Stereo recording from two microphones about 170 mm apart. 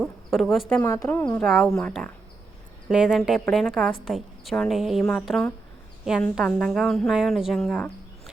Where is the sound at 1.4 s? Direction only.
Centre (ahead or behind).